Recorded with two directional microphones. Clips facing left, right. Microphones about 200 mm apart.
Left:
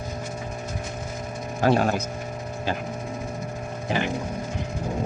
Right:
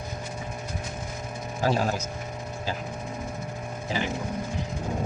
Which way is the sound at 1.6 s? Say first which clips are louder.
Left 5 dB; 60° left (ahead or behind).